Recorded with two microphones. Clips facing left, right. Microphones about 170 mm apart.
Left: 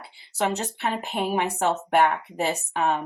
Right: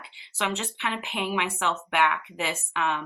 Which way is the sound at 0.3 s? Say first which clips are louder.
Left 4 dB; 40° left (ahead or behind).